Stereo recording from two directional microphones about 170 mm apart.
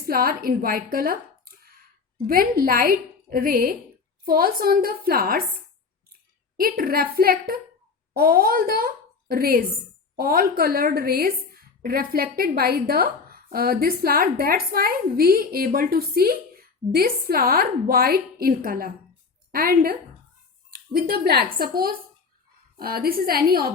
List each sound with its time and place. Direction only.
0.0 s a woman's voice: 60° right (ahead or behind)
6.6 s a woman's voice: 60° right (ahead or behind)